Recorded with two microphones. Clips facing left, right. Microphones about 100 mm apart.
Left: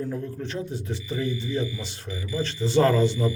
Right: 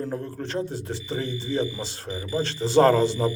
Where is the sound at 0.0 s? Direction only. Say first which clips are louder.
Even; 40° right (ahead or behind).